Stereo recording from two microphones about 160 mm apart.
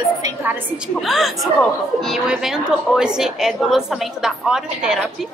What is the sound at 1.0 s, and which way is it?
A woman's voice, centre (ahead or behind).